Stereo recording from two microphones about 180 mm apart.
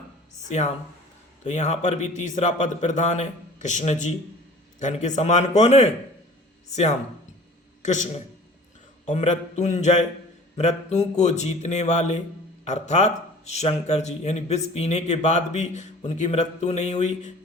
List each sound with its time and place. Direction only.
0.4 s a man's voice: 40° left (ahead or behind)
7.8 s a man's voice: 40° left (ahead or behind)